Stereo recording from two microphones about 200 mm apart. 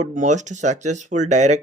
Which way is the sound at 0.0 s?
40° right (ahead or behind).